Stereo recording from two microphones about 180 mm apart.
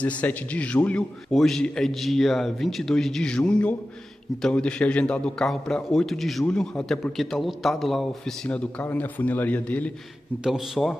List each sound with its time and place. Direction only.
0.0 s a man's voice: 10° left (ahead or behind)
10.4 s a man's voice: centre (ahead or behind)